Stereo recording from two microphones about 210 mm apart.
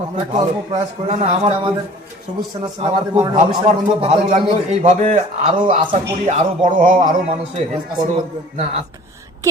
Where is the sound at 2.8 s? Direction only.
30° right (ahead or behind).